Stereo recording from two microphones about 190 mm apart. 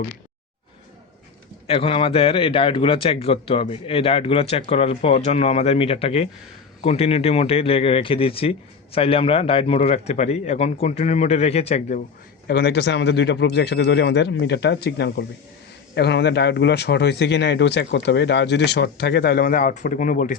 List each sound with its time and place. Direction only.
1.6 s speech: 30° left (ahead or behind)
12.5 s speech: 60° left (ahead or behind); by 20.3 s 45° left (ahead or behind)